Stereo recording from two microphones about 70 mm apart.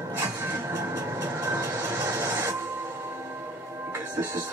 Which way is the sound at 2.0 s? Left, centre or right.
Right.